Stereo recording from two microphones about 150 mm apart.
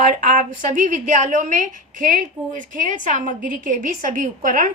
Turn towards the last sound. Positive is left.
turn(degrees=-65)  # may be behind; listen again after turning